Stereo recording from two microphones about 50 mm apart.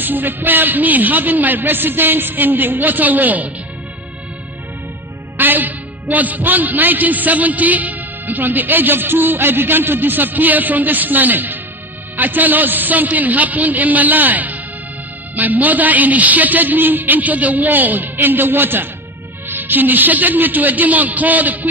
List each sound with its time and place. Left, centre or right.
0.0 s a man's voice: right
5.4 s a man's voice: right